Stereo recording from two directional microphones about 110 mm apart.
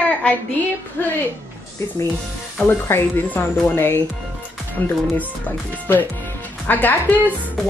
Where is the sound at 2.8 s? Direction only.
20° left (ahead or behind).